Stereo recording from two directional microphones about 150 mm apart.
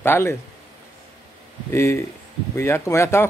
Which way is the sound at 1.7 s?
20° left (ahead or behind).